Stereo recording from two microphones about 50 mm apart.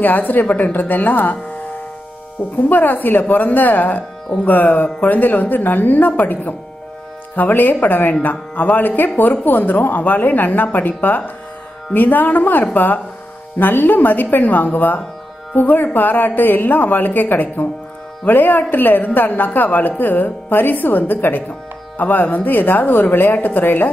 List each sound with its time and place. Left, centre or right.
0.0 s speech: left
2.5 s speech: left